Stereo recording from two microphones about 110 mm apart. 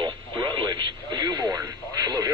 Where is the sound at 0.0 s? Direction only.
45° right (ahead or behind).